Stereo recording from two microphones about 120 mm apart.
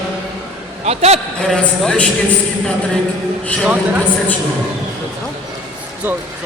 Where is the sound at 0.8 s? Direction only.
60° right (ahead or behind).